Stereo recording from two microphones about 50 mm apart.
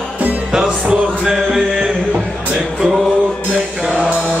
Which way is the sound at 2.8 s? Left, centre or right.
Right.